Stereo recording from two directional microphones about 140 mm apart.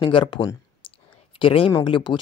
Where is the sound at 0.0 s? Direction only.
40° left (ahead or behind).